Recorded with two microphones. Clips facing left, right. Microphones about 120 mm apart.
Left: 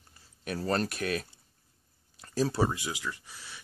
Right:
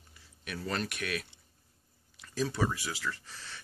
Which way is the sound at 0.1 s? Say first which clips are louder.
Left 6 dB; 40° left (ahead or behind).